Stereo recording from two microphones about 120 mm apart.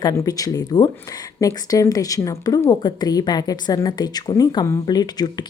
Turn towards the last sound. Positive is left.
turn(degrees=35)  # may be behind; listen again after turning